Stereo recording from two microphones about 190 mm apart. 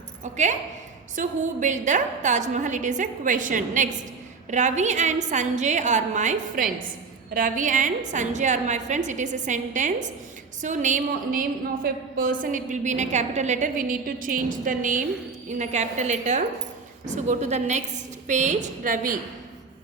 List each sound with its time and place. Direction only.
1.1 s a woman's voice: 40° right (ahead or behind)